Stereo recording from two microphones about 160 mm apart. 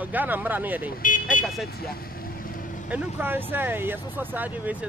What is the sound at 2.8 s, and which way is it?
Speech, 10° right (ahead or behind).